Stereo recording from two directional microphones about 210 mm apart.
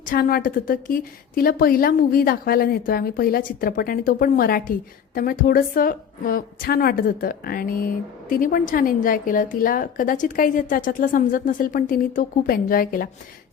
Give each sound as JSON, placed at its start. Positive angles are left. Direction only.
{"t": 0.0, "sound": "a woman's voice", "side_deg": 40}